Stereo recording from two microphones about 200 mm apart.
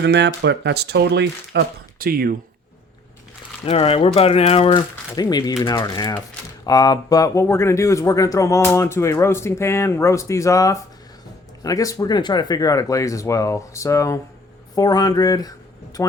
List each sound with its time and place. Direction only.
0.0 s speech: 55° right (ahead or behind)
3.7 s speech: 30° left (ahead or behind)